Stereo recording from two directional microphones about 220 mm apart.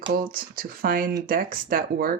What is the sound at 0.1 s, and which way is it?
Speech, 40° right (ahead or behind).